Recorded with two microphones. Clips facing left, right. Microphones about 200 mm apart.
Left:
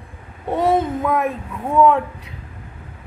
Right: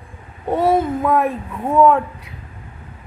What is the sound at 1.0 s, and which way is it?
Speech, 35° right (ahead or behind).